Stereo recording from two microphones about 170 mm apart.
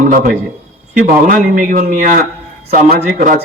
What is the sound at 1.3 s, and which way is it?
A man's voice, 55° right (ahead or behind).